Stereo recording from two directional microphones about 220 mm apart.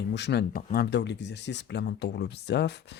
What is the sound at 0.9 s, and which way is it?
Speech, 50° left (ahead or behind).